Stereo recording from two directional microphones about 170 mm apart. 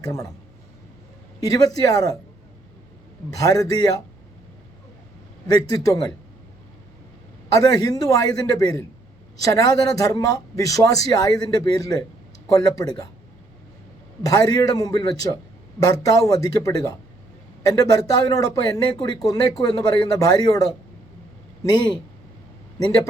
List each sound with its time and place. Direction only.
0.0 s speech: 20° left (ahead or behind)
1.4 s speech: 20° left (ahead or behind)
3.2 s speech: 20° left (ahead or behind)
5.5 s speech: 20° left (ahead or behind)
7.5 s speech: 20° left (ahead or behind)
14.3 s speech: 20° left (ahead or behind)